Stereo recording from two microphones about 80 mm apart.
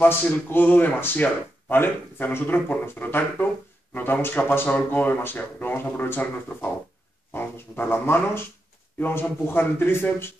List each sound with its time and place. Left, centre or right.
0.0 s speech: left